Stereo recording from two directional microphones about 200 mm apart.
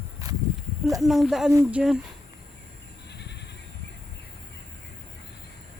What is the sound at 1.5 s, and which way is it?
Speech, 15° right (ahead or behind).